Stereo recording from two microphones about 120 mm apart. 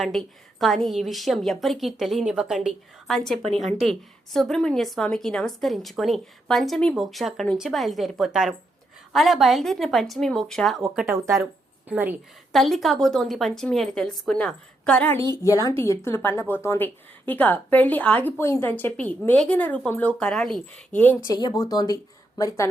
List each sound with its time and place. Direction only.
0.0 s a woman's voice: centre (ahead or behind)
4.4 s a woman's voice: 5° left (ahead or behind)
11.0 s a woman's voice: 25° right (ahead or behind)
12.5 s a woman's voice: centre (ahead or behind)
15.7 s speech: 20° left (ahead or behind)
21.2 s a woman's voice: 30° left (ahead or behind)